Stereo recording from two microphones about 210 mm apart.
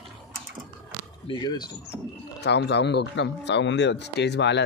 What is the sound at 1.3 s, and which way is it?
Speech, 20° left (ahead or behind).